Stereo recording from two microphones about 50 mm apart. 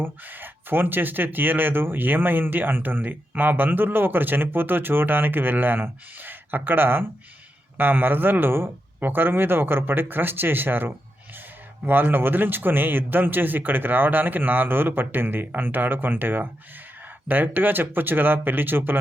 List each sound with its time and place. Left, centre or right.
0.0 s speech: right